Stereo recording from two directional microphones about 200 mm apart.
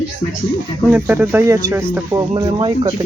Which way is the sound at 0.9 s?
10° right (ahead or behind).